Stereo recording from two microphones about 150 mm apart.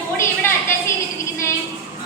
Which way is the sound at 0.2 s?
20° left (ahead or behind).